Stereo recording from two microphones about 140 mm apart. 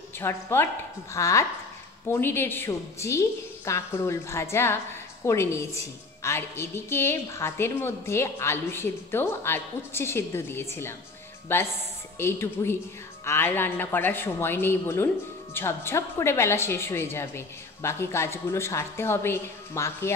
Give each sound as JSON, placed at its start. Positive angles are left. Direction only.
{"t": 0.2, "sound": "a woman's voice", "side_deg": 15}